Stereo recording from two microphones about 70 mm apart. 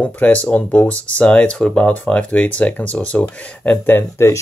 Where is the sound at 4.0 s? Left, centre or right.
Left.